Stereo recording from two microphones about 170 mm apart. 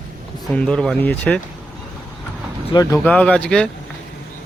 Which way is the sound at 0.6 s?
5° left (ahead or behind).